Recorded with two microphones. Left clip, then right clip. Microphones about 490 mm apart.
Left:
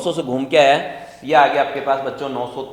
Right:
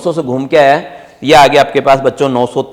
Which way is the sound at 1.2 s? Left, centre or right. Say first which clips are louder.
Right 8 dB; right.